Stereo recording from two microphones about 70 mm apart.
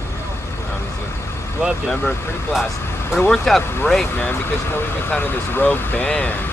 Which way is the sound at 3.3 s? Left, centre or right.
Centre.